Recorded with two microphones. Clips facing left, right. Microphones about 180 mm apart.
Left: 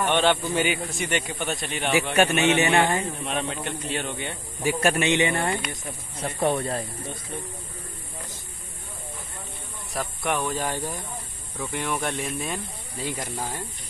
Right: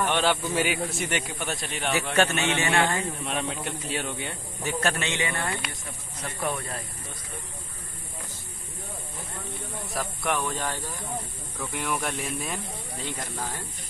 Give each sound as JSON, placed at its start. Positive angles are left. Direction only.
{"t": 0.0, "sound": "a man's voice", "side_deg": -5}
{"t": 2.1, "sound": "a man's voice", "side_deg": 15}
{"t": 3.3, "sound": "a man's voice", "side_deg": 0}
{"t": 4.6, "sound": "a man's voice", "side_deg": 10}
{"t": 9.9, "sound": "a man's voice", "side_deg": 0}
{"t": 11.7, "sound": "a man's voice", "side_deg": 0}
{"t": 13.0, "sound": "a man's voice", "side_deg": 10}